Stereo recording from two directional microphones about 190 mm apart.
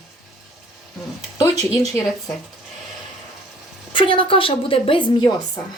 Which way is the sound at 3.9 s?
25° left (ahead or behind).